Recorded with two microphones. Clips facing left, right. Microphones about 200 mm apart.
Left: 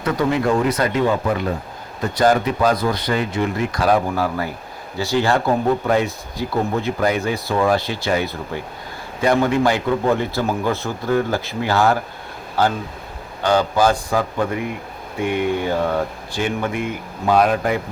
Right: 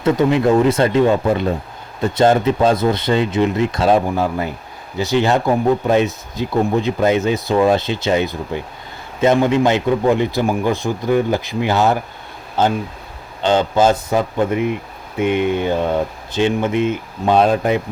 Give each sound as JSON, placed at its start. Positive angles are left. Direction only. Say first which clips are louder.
{"t": 0.0, "sound": "a man's voice", "louder": "right 4 dB", "side_deg": -25}